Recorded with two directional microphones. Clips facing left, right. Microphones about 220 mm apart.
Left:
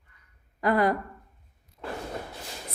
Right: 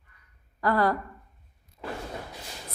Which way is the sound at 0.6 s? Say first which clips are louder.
Left 1 dB; 20° left (ahead or behind).